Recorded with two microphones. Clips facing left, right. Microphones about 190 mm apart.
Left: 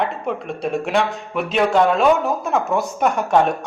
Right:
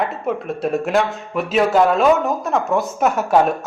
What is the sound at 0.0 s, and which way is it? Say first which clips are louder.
Speech: right 1 dB; centre (ahead or behind).